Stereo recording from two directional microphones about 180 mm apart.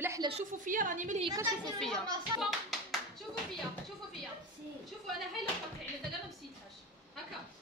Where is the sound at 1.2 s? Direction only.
20° right (ahead or behind).